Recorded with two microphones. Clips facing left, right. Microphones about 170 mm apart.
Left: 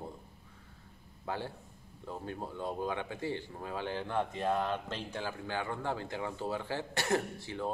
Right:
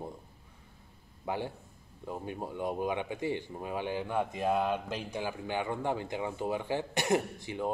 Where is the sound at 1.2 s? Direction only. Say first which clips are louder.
Right 3 dB; 15° right (ahead or behind).